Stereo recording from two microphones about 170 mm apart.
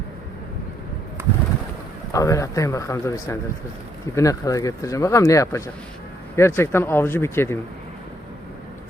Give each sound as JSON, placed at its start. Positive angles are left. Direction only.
{"t": 2.1, "sound": "speech", "side_deg": 20}